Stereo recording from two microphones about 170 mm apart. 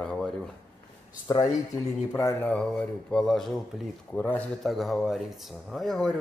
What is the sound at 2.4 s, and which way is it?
Speech, 5° left (ahead or behind).